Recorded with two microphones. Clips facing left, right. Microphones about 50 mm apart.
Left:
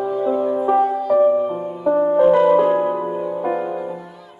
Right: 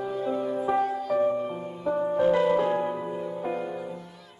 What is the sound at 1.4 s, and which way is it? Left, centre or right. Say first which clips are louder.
Music: left 10 dB; centre.